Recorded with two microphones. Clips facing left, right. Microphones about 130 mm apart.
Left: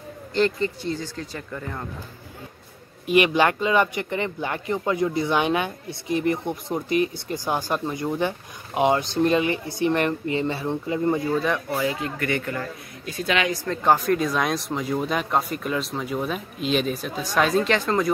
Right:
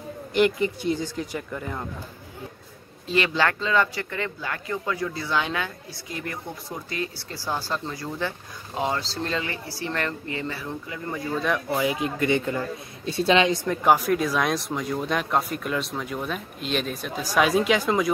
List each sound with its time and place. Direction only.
0.3 s speech: 15° right (ahead or behind)
3.1 s speech: 15° left (ahead or behind)
11.7 s speech: 15° right (ahead or behind)
13.7 s speech: 10° right (ahead or behind)